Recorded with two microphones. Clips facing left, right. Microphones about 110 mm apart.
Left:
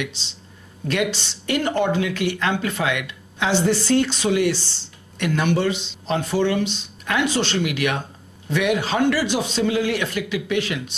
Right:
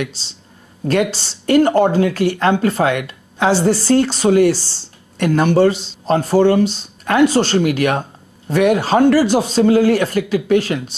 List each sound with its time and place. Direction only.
0.2 s speech: 40° right (ahead or behind)